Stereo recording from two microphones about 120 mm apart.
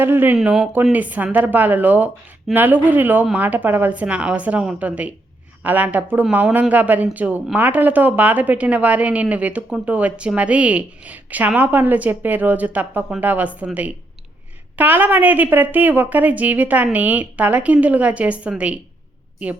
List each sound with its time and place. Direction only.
0.0 s a woman's voice: 15° right (ahead or behind)
0.3 s speech: 5° right (ahead or behind)
0.9 s a woman's voice: 15° right (ahead or behind)
14.8 s a woman's voice: 15° right (ahead or behind)